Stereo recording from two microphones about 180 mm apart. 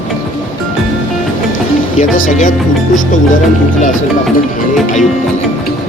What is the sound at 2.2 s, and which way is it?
Speech, 45° left (ahead or behind).